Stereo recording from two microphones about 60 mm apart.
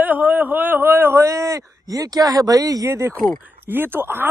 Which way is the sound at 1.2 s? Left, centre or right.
Right.